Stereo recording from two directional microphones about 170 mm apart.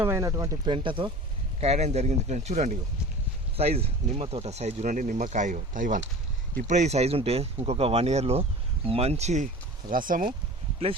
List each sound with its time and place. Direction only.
0.0 s speech: 15° right (ahead or behind); by 9.5 s 40° right (ahead or behind)
9.9 s speech: 55° right (ahead or behind)